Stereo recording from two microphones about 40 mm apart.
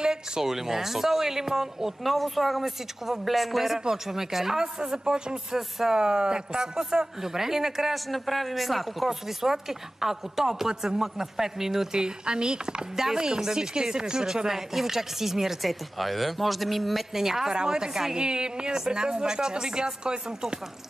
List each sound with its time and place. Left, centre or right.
0.0 s speech: centre
11.9 s speech: right